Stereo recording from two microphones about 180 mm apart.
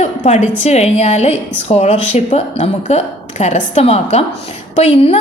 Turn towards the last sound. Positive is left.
turn(degrees=35)  # may be behind; listen again after turning